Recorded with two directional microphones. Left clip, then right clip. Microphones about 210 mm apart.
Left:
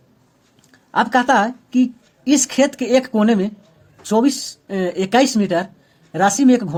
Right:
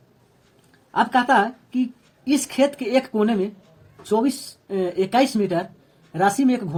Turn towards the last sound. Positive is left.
turn(degrees=40)  # may be behind; listen again after turning